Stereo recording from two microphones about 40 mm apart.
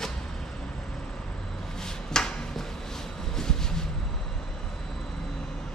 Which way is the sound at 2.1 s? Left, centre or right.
Centre.